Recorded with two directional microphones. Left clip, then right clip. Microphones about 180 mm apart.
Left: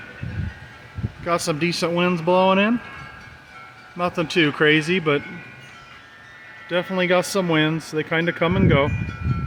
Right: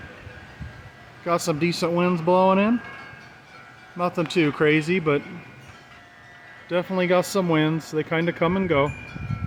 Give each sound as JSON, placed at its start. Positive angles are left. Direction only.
{"t": 1.2, "sound": "speech", "side_deg": -10}
{"t": 3.9, "sound": "speech", "side_deg": -5}
{"t": 6.7, "sound": "speech", "side_deg": -10}